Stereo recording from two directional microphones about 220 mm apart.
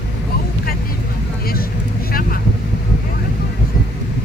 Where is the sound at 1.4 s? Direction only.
45° left (ahead or behind).